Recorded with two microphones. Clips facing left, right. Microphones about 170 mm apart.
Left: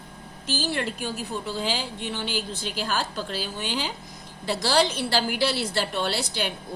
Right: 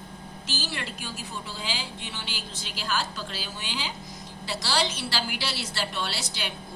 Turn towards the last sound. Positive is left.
turn(degrees=50)  # may be behind; listen again after turning